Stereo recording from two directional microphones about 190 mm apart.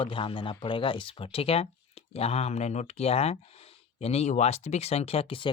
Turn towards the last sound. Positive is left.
turn(degrees=30)  # may be behind; listen again after turning